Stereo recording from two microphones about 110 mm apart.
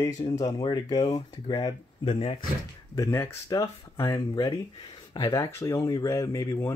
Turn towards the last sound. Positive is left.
turn(degrees=25)  # may be behind; listen again after turning